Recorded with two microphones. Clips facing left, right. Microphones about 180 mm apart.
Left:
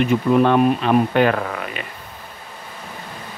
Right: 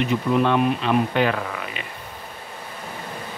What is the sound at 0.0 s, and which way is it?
Speech, 50° left (ahead or behind).